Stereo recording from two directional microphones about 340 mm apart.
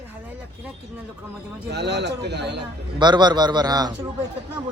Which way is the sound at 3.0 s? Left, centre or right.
Centre.